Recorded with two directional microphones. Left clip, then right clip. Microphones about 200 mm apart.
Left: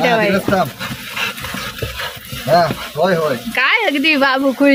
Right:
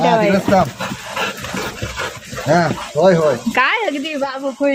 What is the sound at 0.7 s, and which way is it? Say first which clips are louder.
Dog: even; 40° right (ahead or behind).